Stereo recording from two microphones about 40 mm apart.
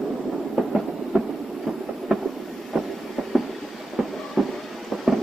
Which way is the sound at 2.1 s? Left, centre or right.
Centre.